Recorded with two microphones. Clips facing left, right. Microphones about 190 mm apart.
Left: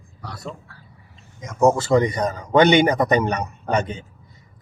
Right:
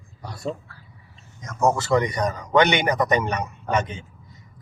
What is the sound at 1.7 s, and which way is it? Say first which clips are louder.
A man's voice: left 3 dB; 30° left (ahead or behind).